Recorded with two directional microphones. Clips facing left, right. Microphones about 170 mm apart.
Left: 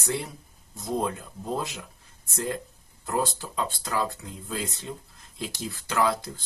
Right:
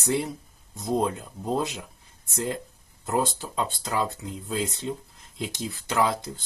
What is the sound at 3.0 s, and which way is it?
Speech, 20° right (ahead or behind).